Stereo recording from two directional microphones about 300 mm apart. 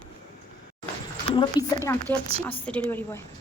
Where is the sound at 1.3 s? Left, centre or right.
Centre.